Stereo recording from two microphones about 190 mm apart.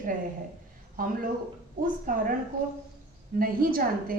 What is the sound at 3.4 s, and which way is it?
Speech, 50° right (ahead or behind).